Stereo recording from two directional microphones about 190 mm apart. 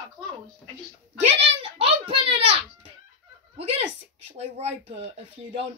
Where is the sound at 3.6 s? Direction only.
30° right (ahead or behind).